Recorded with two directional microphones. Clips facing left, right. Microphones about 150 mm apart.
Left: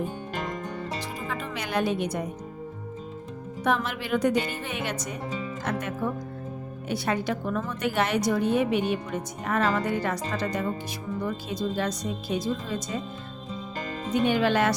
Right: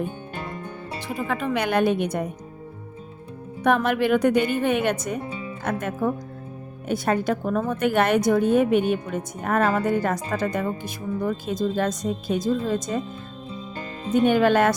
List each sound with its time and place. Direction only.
1.0 s a woman's voice: 60° right (ahead or behind)
3.6 s a woman's voice: 55° right (ahead or behind)
14.1 s a woman's voice: 50° right (ahead or behind)